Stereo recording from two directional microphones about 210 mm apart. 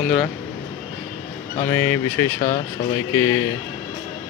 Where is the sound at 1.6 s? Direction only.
10° left (ahead or behind).